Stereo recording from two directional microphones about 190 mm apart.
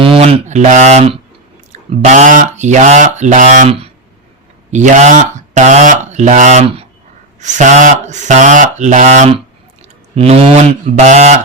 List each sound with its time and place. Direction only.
0.0 s speech: 30° right (ahead or behind)